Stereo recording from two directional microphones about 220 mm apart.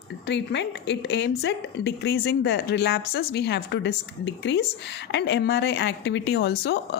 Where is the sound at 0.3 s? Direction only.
55° left (ahead or behind).